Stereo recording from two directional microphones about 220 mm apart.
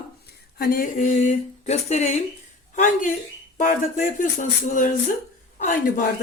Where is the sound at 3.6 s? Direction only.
40° left (ahead or behind).